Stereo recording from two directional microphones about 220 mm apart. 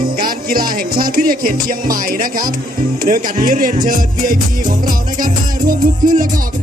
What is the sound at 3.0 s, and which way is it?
Music, 40° right (ahead or behind).